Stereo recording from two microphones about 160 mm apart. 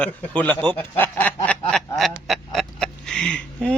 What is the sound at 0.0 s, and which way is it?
Speech, 10° left (ahead or behind).